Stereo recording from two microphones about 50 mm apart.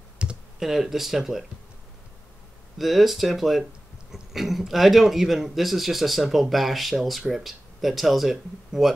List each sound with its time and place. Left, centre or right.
0.2 s computer keyboard: right
0.6 s speech: centre
2.8 s speech: centre